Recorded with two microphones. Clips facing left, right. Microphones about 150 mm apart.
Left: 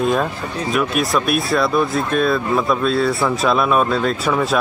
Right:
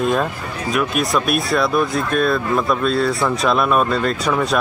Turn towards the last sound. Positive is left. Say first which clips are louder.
# left 1 dB
turn(degrees=5)  # may be behind; listen again after turning